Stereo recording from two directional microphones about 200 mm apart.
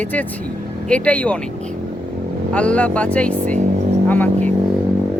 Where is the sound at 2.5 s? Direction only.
5° left (ahead or behind).